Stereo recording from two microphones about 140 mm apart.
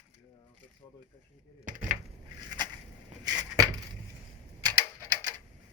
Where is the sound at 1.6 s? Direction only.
65° right (ahead or behind).